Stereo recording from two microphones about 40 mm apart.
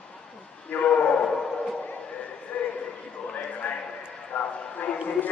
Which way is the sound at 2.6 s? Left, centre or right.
Left.